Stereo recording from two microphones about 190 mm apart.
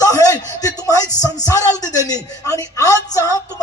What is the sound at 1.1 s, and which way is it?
Speech, 20° left (ahead or behind).